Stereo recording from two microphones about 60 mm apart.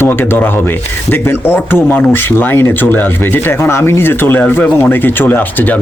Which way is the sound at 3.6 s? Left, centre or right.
Left.